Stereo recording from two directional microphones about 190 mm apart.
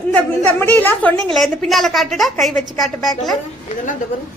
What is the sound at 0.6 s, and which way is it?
A woman's voice, 10° left (ahead or behind).